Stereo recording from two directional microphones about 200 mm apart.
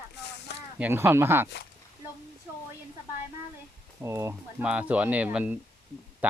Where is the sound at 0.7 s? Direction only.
10° right (ahead or behind).